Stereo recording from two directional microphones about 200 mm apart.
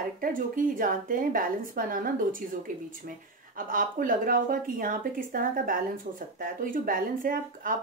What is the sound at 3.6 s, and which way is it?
Speech, 45° right (ahead or behind).